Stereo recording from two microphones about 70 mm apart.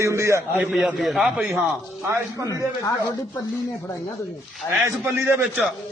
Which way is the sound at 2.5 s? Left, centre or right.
Left.